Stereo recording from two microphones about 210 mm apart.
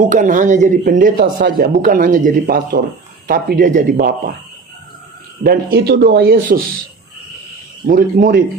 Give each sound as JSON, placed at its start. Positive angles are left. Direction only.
{"t": 0.1, "sound": "a man's voice", "side_deg": -35}
{"t": 5.4, "sound": "a man's voice", "side_deg": -50}
{"t": 7.9, "sound": "speech", "side_deg": -40}